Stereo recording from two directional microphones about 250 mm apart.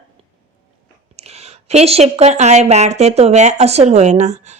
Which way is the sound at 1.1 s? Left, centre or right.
Right.